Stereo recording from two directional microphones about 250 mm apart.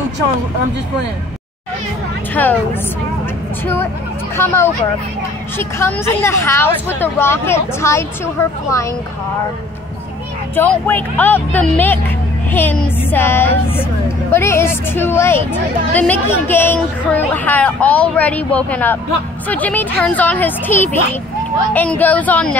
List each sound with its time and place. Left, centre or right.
2.3 s speech: centre
5.6 s speech: centre
10.5 s speech: centre